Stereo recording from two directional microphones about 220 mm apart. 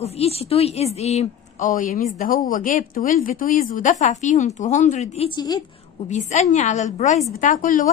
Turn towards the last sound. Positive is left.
turn(degrees=40)  # may be behind; listen again after turning